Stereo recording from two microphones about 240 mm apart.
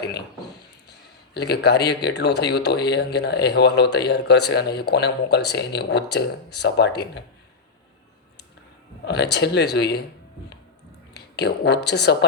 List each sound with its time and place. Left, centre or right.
0.9 s speech: left
9.0 s speech: left
11.1 s speech: left